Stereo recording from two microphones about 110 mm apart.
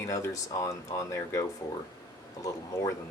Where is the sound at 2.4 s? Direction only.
30° left (ahead or behind).